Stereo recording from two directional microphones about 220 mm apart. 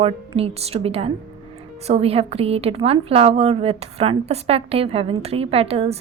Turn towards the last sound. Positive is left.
turn(degrees=-25)  # may be behind; listen again after turning